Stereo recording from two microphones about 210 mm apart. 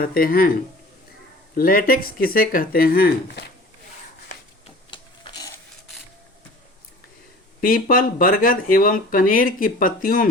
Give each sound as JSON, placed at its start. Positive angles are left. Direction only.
{"t": 0.0, "sound": "speech", "side_deg": 45}
{"t": 1.5, "sound": "speech", "side_deg": 45}
{"t": 4.9, "sound": "printer", "side_deg": 20}
{"t": 7.6, "sound": "speech", "side_deg": 45}